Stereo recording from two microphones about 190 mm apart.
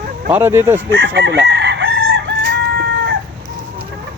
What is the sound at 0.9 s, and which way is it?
Chicken, 65° right (ahead or behind).